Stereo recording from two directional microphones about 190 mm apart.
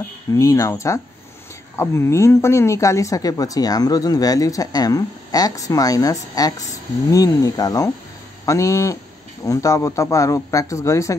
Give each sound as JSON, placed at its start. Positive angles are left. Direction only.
{"t": 0.3, "sound": "a man's voice", "side_deg": 15}